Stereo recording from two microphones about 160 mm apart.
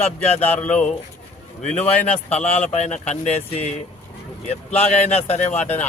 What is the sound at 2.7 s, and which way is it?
Speech, 45° left (ahead or behind).